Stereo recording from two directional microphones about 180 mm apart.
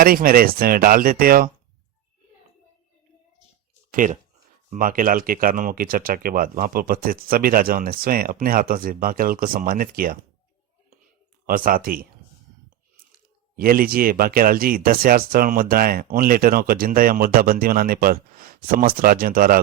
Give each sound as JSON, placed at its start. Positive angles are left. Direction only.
{"t": 0.0, "sound": "speech", "side_deg": -55}
{"t": 3.9, "sound": "speech", "side_deg": -45}
{"t": 11.4, "sound": "speech", "side_deg": -50}
{"t": 13.6, "sound": "speech", "side_deg": -55}